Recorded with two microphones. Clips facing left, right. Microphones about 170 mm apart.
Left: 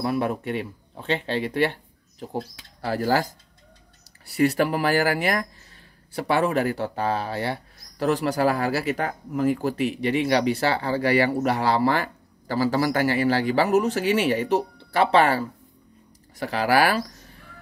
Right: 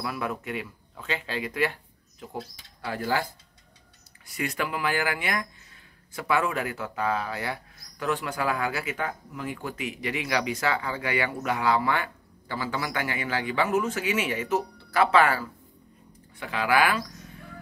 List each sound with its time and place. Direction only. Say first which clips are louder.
0.0 s speech: left 7 dB; 35° left (ahead or behind)